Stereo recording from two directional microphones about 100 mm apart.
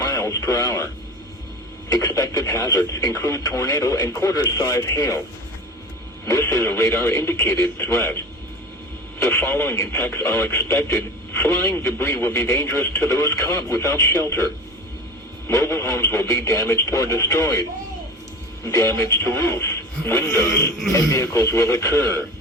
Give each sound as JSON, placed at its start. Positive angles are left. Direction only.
{"t": 0.0, "sound": "radio", "side_deg": 35}
{"t": 1.9, "sound": "speech", "side_deg": 40}
{"t": 6.2, "sound": "a man's voice", "side_deg": 30}
{"t": 9.2, "sound": "a man's voice", "side_deg": 25}